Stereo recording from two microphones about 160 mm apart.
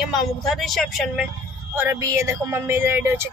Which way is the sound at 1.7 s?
15° right (ahead or behind).